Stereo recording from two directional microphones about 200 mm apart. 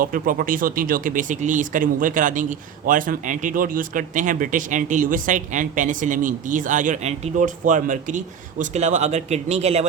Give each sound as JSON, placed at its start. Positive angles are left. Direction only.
{"t": 0.0, "sound": "speech", "side_deg": -45}